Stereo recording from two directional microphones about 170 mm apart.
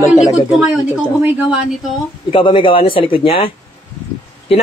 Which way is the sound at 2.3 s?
30° left (ahead or behind).